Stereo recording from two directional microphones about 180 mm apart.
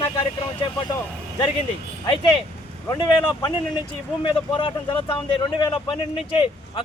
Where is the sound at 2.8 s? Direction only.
20° left (ahead or behind).